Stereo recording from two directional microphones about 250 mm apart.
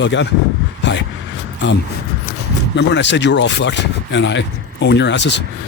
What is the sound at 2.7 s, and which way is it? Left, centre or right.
Speech, left.